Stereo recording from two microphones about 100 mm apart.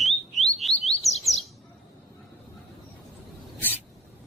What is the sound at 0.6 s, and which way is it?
Chirp, centre (ahead or behind).